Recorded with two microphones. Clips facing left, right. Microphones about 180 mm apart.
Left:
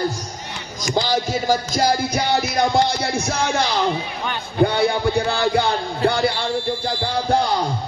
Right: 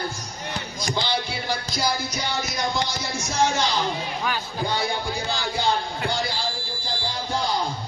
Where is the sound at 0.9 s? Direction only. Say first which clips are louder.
Left 7 dB; 45° left (ahead or behind); by 3.7 s 60° left (ahead or behind).